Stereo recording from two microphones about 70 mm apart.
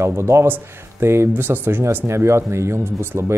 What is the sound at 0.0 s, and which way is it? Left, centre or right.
Speech, right.